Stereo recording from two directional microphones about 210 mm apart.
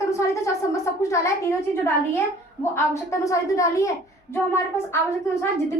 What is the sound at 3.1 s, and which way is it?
A woman's voice, 15° left (ahead or behind).